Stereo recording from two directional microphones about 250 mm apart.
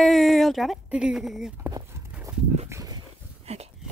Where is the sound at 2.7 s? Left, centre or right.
Centre.